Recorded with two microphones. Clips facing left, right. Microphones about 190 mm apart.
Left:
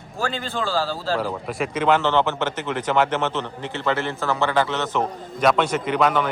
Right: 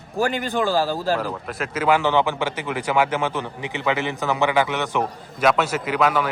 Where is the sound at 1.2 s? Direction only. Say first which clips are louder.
Left 2 dB; centre (ahead or behind).